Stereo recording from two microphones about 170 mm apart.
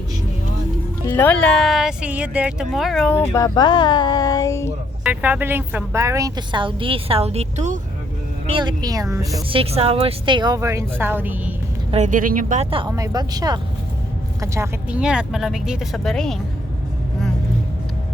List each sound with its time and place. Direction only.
1.0 s speech: 10° left (ahead or behind)
5.0 s a woman's voice: 10° right (ahead or behind); by 7.8 s 45° right (ahead or behind)
8.4 s a woman's voice: 25° right (ahead or behind)
9.5 s a woman's voice: 35° right (ahead or behind); by 11.5 s 10° right (ahead or behind)
11.9 s speech: 45° right (ahead or behind)
12.9 s a woman's voice: 20° right (ahead or behind); by 16.4 s 5° left (ahead or behind)